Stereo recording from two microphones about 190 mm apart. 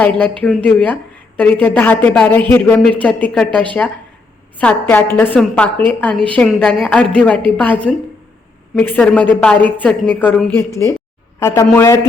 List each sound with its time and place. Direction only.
0.0 s a woman's voice: 5° left (ahead or behind)